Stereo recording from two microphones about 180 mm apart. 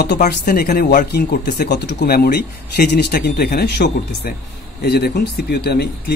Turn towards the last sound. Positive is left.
turn(degrees=65)  # may be behind; listen again after turning